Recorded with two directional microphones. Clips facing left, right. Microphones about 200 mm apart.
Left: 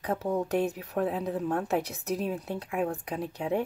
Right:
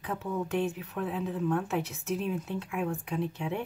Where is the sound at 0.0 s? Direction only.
40° left (ahead or behind).